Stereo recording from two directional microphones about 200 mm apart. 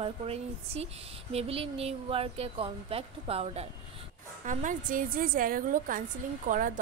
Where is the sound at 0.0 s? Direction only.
30° right (ahead or behind).